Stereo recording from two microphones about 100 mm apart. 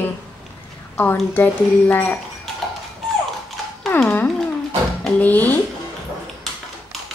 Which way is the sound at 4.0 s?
10° left (ahead or behind).